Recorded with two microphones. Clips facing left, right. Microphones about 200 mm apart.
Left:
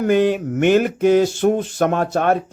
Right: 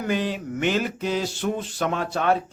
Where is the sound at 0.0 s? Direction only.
55° left (ahead or behind).